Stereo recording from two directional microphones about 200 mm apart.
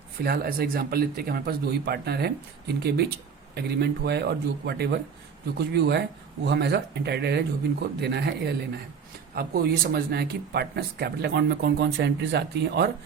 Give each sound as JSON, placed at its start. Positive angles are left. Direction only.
{"t": 0.2, "sound": "speech", "side_deg": -50}